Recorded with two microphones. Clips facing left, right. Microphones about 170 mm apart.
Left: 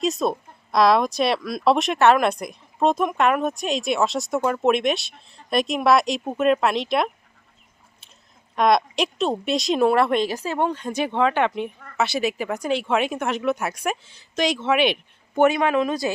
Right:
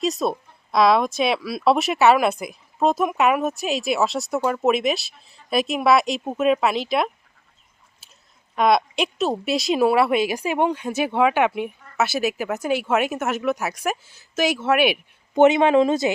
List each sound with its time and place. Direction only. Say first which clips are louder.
0.0 s speech: even; centre (ahead or behind)
8.5 s speech: even; centre (ahead or behind)
15.4 s speech: right 4 dB; 20° right (ahead or behind)